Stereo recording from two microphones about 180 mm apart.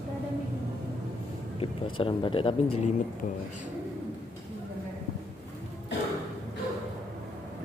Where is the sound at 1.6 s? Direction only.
30° left (ahead or behind).